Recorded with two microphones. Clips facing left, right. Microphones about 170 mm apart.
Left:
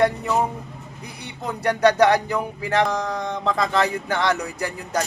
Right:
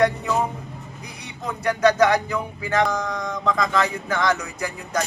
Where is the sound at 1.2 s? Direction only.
35° left (ahead or behind).